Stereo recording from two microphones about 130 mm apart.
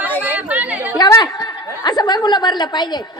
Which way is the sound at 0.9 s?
30° left (ahead or behind).